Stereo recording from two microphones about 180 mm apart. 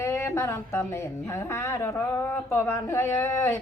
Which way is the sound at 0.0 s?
15° left (ahead or behind).